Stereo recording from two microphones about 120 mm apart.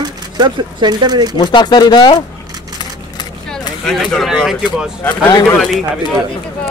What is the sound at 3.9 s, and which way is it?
Speech, 5° left (ahead or behind).